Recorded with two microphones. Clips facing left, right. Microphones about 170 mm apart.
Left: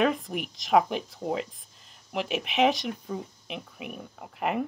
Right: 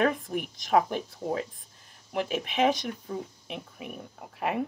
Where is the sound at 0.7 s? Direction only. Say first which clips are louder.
Left 1 dB; 15° left (ahead or behind).